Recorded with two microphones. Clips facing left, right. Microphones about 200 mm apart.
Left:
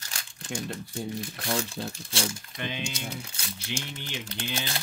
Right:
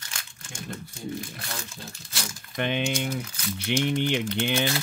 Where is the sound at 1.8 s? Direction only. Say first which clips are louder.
Left 7 dB; 80° left.